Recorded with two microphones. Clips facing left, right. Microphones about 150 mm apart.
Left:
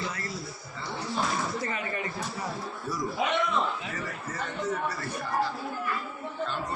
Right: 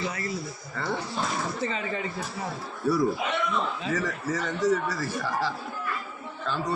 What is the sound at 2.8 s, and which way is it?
Speech, 65° right (ahead or behind).